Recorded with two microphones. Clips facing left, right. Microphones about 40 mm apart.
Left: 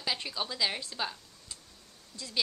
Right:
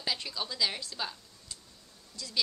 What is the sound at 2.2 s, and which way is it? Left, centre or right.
Speech, left.